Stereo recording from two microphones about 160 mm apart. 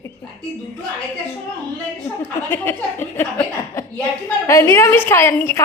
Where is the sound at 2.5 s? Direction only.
15° left (ahead or behind).